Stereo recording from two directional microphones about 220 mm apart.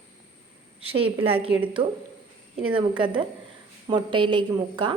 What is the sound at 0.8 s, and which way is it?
Speech, 25° right (ahead or behind).